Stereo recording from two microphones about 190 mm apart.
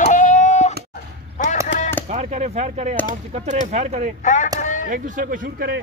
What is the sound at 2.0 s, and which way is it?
Speech, 35° right (ahead or behind).